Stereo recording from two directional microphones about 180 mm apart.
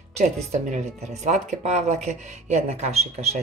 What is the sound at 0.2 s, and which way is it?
Speech, 40° right (ahead or behind).